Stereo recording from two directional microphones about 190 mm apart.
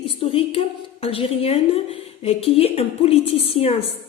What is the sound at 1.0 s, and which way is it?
A woman's voice, 30° left (ahead or behind).